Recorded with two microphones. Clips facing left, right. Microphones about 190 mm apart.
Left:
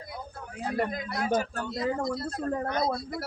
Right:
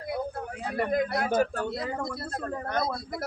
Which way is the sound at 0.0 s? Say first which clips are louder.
Right 9 dB; 60° right (ahead or behind).